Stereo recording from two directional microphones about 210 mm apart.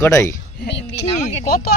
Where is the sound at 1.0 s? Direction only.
30° left (ahead or behind).